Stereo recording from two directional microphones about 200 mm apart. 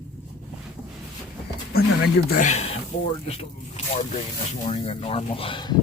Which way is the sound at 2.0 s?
45° left (ahead or behind).